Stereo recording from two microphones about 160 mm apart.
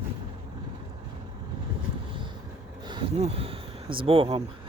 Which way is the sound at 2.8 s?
25° right (ahead or behind).